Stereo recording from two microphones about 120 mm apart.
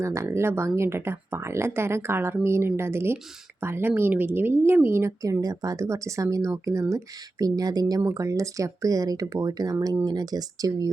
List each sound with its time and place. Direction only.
0.0 s speech: 25° right (ahead or behind)